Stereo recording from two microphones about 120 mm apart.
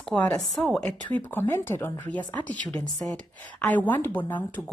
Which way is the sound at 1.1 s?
15° left (ahead or behind).